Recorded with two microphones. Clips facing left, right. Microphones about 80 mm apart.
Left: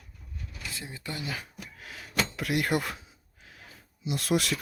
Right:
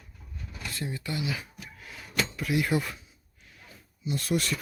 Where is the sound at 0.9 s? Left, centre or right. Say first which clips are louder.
Right 5 dB; left.